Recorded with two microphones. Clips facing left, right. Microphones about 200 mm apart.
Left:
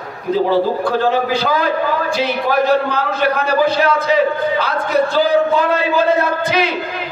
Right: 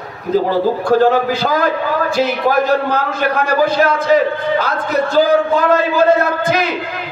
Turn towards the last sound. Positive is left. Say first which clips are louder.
# right 2 dB
turn(degrees=-45)  # may be behind; listen again after turning